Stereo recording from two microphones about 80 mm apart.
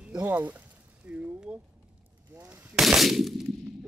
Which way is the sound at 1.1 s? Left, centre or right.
Centre.